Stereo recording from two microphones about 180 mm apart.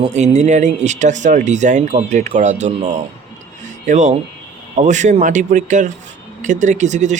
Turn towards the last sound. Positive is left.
turn(degrees=-40)  # may be behind; listen again after turning